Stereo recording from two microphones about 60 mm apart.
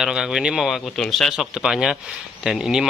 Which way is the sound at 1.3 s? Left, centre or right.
Centre.